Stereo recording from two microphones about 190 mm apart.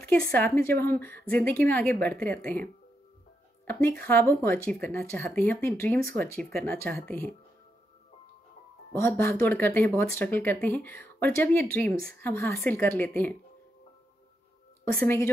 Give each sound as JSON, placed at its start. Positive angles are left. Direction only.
{"t": 0.6, "sound": "speech", "side_deg": 10}
{"t": 8.9, "sound": "speech", "side_deg": 10}
{"t": 15.0, "sound": "speech", "side_deg": 10}